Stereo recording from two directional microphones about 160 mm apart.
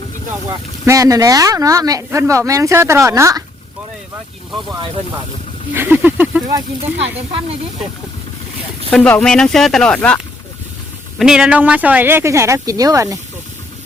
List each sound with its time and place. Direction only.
0.4 s speech: 20° right (ahead or behind)
5.7 s speech: 10° right (ahead or behind)
8.9 s speech: 5° left (ahead or behind)
11.2 s speech: 5° right (ahead or behind); by 13.1 s 20° right (ahead or behind)